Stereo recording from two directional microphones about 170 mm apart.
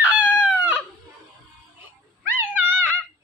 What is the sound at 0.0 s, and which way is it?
Chicken, 10° right (ahead or behind).